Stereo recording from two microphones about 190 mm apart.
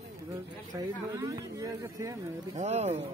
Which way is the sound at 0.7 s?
20° right (ahead or behind).